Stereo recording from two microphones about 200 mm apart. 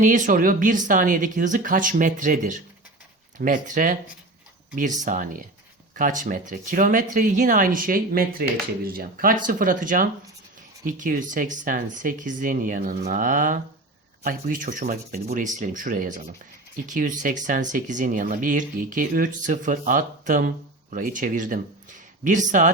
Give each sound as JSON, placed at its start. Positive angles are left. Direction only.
{"t": 0.0, "sound": "speech", "side_deg": -40}